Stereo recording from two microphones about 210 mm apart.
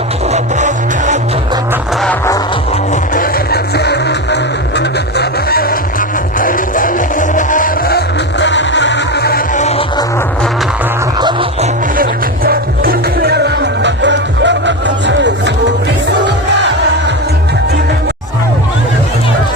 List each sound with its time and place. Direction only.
0.3 s music: 35° right (ahead or behind)
2.0 s music: 15° left (ahead or behind)
3.2 s music: 45° left (ahead or behind)
9.6 s music: 30° left (ahead or behind)
11.2 s music: 25° right (ahead or behind)
12.5 s music: 45° right (ahead or behind)